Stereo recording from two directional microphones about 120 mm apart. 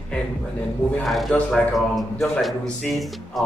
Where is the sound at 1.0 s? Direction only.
Centre (ahead or behind).